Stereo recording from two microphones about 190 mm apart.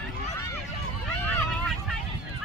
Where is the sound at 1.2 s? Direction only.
5° left (ahead or behind).